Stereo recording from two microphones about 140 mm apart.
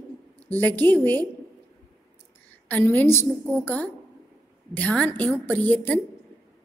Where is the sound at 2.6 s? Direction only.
15° left (ahead or behind).